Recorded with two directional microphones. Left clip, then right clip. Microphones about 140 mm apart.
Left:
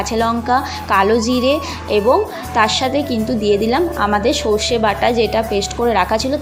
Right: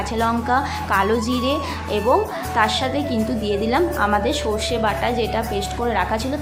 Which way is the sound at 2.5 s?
25° left (ahead or behind).